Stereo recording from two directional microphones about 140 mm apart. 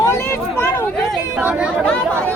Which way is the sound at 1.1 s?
5° right (ahead or behind).